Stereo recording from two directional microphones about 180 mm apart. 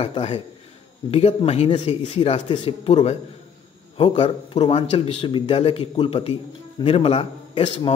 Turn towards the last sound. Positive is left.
turn(degrees=30)  # may be behind; listen again after turning